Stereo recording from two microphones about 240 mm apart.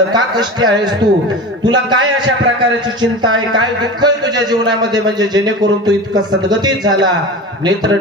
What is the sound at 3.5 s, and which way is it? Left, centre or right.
A man's voice, centre.